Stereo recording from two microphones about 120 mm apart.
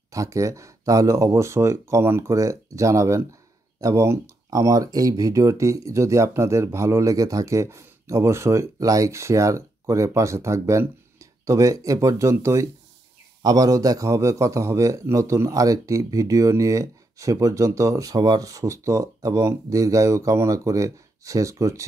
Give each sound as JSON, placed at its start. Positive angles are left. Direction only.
{"t": 0.1, "sound": "speech", "side_deg": -25}